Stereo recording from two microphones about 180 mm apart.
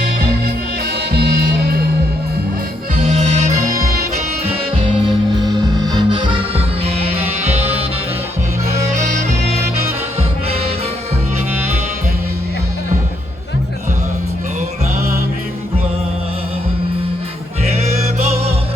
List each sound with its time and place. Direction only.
1.1 s music: 60° right (ahead or behind)
2.9 s music: 40° right (ahead or behind)
4.8 s music: 25° right (ahead or behind)
9.0 s music: 40° right (ahead or behind)
17.7 s music: 35° right (ahead or behind)